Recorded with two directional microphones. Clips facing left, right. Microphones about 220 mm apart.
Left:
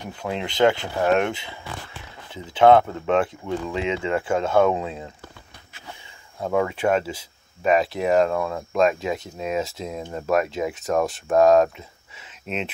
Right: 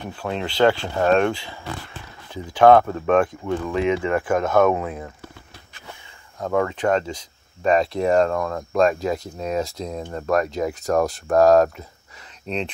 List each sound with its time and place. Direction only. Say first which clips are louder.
0.0 s speech: right 1 dB; 15° left (ahead or behind)
6.4 s speech: right 1 dB; 10° left (ahead or behind)